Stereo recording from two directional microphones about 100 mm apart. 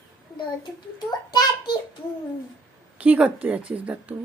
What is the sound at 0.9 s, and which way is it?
Child singing, 45° left (ahead or behind).